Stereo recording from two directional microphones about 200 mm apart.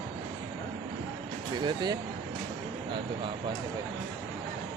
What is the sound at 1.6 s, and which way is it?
Speech, 20° right (ahead or behind).